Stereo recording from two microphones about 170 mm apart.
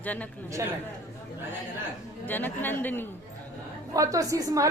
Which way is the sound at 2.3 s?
10° left (ahead or behind).